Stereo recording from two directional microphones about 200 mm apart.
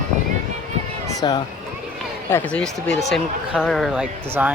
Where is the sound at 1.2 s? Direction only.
25° left (ahead or behind).